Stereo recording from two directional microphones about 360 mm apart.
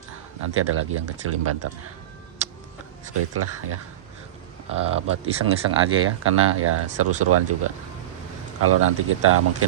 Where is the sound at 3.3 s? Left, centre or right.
Right.